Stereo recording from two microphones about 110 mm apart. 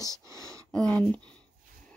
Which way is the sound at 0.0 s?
30° right (ahead or behind).